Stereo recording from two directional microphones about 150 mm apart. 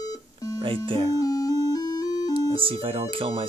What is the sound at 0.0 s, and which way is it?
Alarm clock, 25° left (ahead or behind).